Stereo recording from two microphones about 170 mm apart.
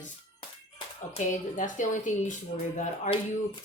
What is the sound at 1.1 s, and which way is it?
Speech, 50° left (ahead or behind).